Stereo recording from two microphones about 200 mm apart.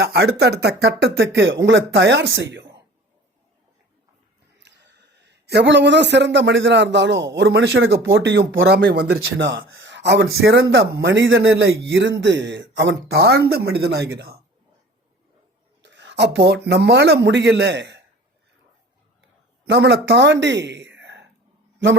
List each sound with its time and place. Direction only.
0.0 s speech: 55° right (ahead or behind)
4.5 s speech: 60° right (ahead or behind)
15.8 s speech: 60° right (ahead or behind)
19.6 s speech: 60° right (ahead or behind)